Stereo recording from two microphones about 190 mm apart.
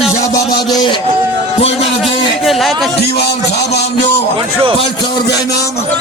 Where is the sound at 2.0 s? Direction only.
Centre (ahead or behind).